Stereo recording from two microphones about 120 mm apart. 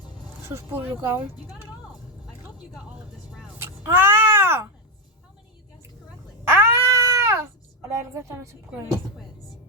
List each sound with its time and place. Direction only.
0.4 s speech: 20° right (ahead or behind)
3.6 s a sound: 20° right (ahead or behind)
6.4 s cat: 20° right (ahead or behind)